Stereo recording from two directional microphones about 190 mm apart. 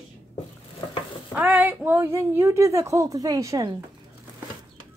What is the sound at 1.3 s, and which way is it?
A woman's voice, 5° right (ahead or behind).